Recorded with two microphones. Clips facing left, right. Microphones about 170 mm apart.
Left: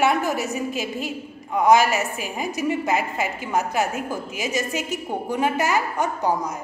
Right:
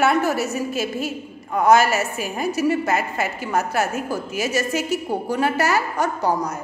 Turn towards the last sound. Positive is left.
turn(degrees=15)  # may be behind; listen again after turning